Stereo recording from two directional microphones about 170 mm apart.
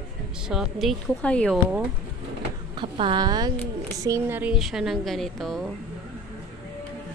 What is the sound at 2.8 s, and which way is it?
A woman's voice, 30° right (ahead or behind).